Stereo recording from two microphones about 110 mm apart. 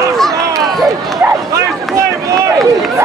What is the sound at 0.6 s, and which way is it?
Run, centre (ahead or behind).